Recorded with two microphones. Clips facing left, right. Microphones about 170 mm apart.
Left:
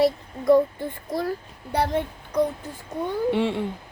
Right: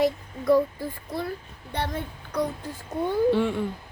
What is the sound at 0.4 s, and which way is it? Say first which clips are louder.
Child singing: left 3 dB; 25° left (ahead or behind).